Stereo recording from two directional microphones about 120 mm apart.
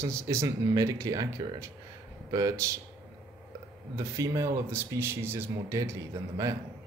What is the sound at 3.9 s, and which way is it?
Speech, 25° right (ahead or behind).